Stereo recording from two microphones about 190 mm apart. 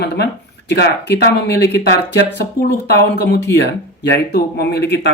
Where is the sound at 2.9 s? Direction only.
60° left (ahead or behind).